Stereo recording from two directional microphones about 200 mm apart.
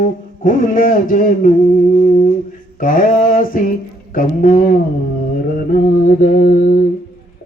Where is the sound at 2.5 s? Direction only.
45° left (ahead or behind).